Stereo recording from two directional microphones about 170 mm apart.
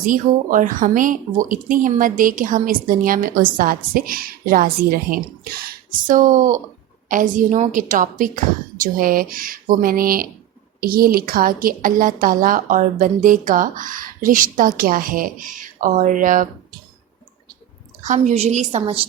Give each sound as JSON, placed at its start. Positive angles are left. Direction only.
{"t": 0.0, "sound": "speech", "side_deg": -50}
{"t": 18.0, "sound": "a woman's voice", "side_deg": -45}